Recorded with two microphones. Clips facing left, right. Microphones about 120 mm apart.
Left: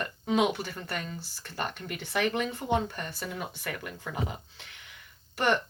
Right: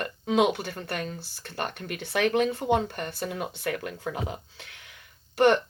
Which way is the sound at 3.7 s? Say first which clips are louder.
Right 6 dB; 75° right (ahead or behind).